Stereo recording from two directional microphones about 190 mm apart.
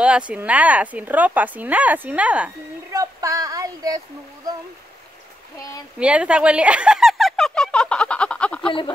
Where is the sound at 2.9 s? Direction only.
20° right (ahead or behind).